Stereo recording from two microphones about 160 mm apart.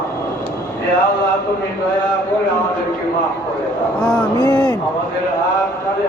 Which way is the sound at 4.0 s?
5° left (ahead or behind).